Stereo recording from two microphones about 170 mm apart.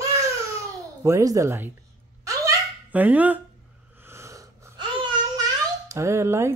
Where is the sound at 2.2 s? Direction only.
15° right (ahead or behind).